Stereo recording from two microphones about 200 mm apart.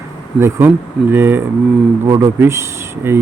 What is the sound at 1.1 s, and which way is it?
A man's voice, 10° right (ahead or behind).